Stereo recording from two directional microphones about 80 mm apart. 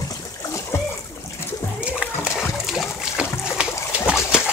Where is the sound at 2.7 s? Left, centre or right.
Centre.